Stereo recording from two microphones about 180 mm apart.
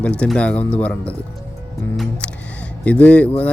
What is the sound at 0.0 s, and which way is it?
Speech, 5° left (ahead or behind).